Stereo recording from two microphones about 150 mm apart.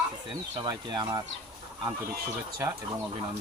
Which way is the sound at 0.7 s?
25° right (ahead or behind).